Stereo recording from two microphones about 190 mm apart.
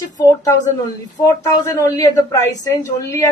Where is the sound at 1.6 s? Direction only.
15° left (ahead or behind).